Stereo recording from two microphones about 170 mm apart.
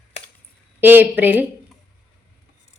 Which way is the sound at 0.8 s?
10° right (ahead or behind).